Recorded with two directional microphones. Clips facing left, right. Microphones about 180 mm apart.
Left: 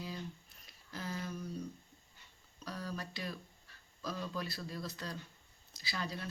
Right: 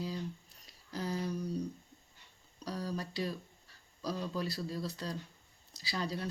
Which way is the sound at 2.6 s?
35° right (ahead or behind).